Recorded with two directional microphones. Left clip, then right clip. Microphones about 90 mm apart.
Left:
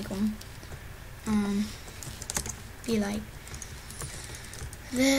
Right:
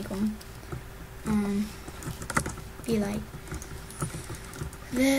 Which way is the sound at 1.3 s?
Centre (ahead or behind).